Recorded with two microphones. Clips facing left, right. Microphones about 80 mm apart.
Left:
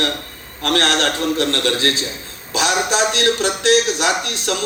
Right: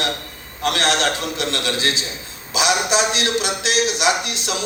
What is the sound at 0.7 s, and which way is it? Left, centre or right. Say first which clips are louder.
A man's voice: left 2 dB; left.